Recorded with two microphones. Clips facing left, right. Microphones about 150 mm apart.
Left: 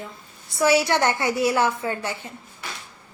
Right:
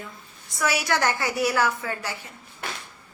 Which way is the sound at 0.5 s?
30° left (ahead or behind).